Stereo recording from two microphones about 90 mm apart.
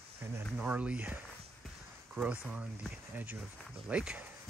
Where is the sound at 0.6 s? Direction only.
15° right (ahead or behind).